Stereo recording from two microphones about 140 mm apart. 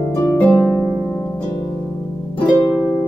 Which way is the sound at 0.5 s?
15° right (ahead or behind).